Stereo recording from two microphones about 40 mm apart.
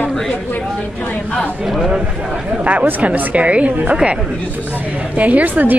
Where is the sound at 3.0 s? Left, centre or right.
Right.